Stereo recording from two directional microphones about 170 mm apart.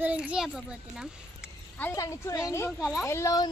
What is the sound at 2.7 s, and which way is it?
Speech, 5° right (ahead or behind).